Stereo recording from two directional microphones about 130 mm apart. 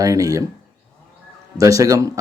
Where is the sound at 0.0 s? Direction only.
25° right (ahead or behind).